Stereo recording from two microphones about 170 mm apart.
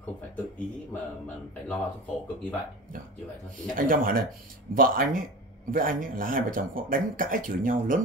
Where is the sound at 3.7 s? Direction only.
55° right (ahead or behind).